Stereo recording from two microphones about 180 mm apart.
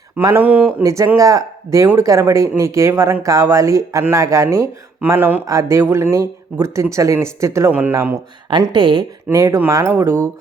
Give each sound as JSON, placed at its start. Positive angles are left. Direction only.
{"t": 0.2, "sound": "speech", "side_deg": -15}
{"t": 8.4, "sound": "speech", "side_deg": -25}